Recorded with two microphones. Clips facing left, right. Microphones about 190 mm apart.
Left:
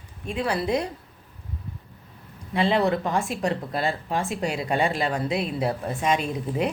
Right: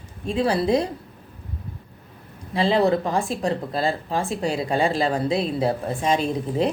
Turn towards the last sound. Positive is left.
turn(degrees=-30)  # may be behind; listen again after turning